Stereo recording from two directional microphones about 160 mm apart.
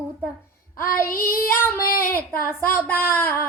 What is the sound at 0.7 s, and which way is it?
Child singing, 65° left (ahead or behind).